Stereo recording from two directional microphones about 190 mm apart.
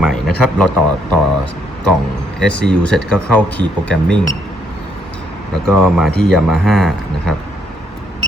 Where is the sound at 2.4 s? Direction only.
5° left (ahead or behind).